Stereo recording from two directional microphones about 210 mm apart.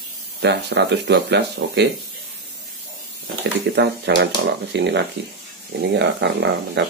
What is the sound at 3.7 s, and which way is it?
Speech, 55° right (ahead or behind).